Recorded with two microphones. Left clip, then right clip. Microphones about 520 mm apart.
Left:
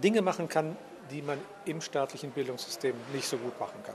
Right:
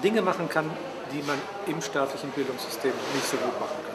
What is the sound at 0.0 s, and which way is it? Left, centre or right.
Speech, left.